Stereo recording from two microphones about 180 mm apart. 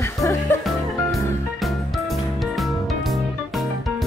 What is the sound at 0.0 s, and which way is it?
Music, 15° left (ahead or behind).